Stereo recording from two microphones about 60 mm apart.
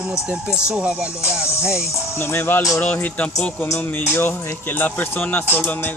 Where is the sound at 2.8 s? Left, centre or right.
Left.